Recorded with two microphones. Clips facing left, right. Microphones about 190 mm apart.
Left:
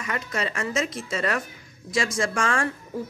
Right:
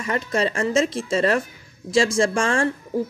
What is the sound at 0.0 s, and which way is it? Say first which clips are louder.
Speech: right 6 dB; 30° right (ahead or behind).